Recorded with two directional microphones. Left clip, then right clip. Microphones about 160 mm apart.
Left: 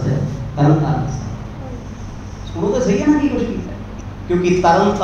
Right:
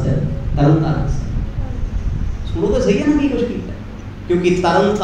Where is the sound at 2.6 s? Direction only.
25° right (ahead or behind).